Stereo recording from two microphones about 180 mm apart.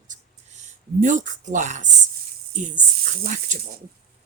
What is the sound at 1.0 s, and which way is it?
Speech, 45° right (ahead or behind).